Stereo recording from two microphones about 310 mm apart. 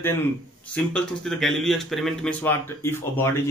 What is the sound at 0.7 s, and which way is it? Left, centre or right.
Speech, centre.